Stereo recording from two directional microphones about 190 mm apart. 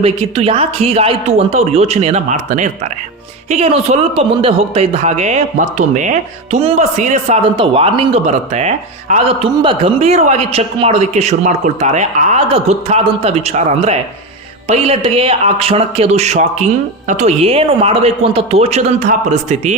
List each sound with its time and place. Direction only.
0.0 s a man's voice: 30° right (ahead or behind)
7.5 s a man's voice: 30° right (ahead or behind)